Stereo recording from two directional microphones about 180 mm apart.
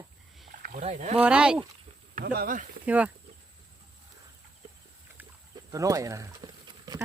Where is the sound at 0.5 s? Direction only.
45° right (ahead or behind).